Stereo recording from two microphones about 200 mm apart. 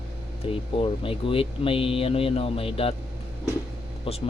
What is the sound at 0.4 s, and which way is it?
Speech, 25° left (ahead or behind).